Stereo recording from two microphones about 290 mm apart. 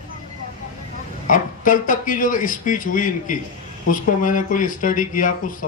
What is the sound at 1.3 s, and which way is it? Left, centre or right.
Speech, left.